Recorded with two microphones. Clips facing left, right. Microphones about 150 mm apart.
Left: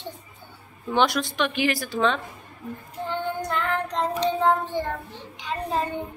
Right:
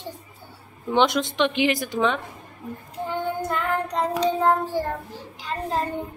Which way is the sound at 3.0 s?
10° right (ahead or behind).